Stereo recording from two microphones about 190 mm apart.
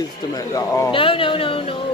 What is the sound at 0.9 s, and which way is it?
Speech, 30° left (ahead or behind).